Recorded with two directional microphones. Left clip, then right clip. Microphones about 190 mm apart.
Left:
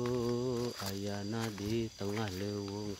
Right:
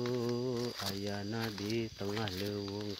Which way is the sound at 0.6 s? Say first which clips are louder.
Even; 25° right (ahead or behind).